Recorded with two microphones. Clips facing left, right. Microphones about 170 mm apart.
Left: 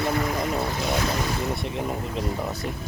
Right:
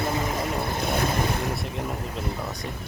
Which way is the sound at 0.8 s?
55° right (ahead or behind).